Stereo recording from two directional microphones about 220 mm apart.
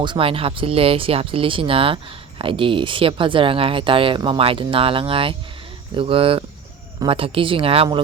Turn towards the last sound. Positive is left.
turn(degrees=-25)  # may be behind; listen again after turning